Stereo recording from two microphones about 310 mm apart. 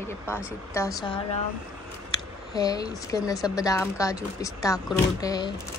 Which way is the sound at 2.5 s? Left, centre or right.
Centre.